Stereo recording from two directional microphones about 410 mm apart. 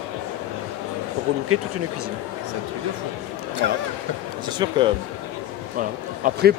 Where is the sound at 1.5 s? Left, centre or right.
Right.